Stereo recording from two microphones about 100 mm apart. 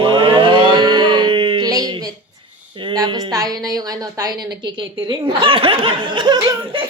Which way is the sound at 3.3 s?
40° right (ahead or behind).